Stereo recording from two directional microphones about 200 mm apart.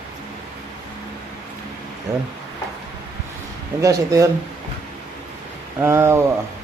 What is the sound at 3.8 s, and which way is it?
Speech, 15° right (ahead or behind).